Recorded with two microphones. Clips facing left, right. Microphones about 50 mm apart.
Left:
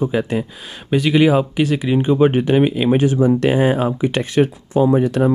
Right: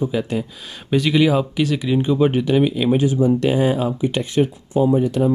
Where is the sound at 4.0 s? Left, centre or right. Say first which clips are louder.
Left 2 dB; left.